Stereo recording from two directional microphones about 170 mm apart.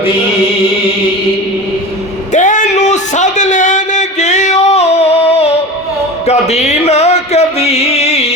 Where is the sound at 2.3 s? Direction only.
45° left (ahead or behind).